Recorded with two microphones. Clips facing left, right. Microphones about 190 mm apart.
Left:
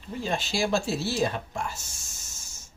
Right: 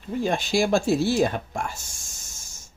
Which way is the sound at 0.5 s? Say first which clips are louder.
Right 6 dB; 50° right (ahead or behind).